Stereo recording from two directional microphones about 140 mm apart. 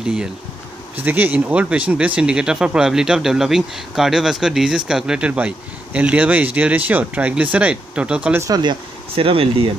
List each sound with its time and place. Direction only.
0.0 s speech: 5° right (ahead or behind)
8.5 s speech: 30° right (ahead or behind)